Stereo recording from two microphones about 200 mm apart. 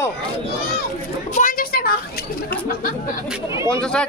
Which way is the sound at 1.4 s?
45° left (ahead or behind).